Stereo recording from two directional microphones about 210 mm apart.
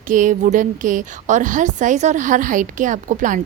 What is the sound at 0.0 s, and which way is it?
A woman's voice, 40° right (ahead or behind).